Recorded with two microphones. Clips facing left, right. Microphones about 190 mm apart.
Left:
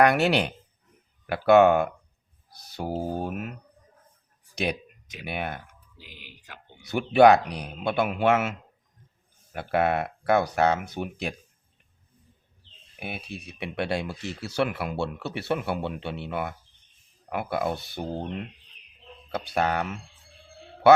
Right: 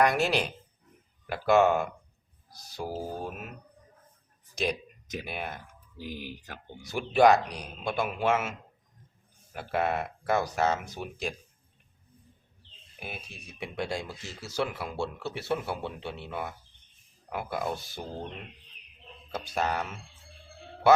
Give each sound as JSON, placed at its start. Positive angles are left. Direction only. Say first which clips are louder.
{"t": 0.0, "sound": "speech", "louder": "left 4 dB", "side_deg": 65}
{"t": 4.5, "sound": "speech", "louder": "left 2 dB", "side_deg": 65}
{"t": 6.0, "sound": "speech", "louder": "right 12 dB", "side_deg": -45}
{"t": 6.8, "sound": "speech", "louder": "left 4 dB", "side_deg": 65}
{"t": 13.0, "sound": "speech", "louder": "left 6 dB", "side_deg": 65}
{"t": 19.3, "sound": "speech", "louder": "left 4 dB", "side_deg": 65}